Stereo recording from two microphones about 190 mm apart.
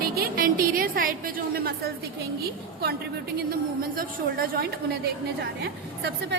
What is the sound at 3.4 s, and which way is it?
A woman's voice, 50° right (ahead or behind).